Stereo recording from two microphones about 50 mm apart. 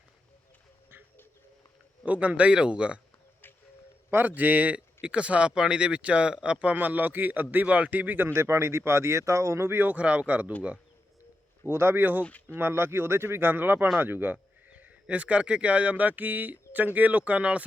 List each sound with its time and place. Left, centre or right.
2.0 s speech: right
4.1 s a man's voice: right
7.5 s a man's voice: right
8.3 s speech: right
9.7 s a man's voice: right
10.0 s speech: right
11.6 s speech: right
12.2 s speech: left
12.5 s speech: right
13.5 s a man's voice: right
14.7 s speech: right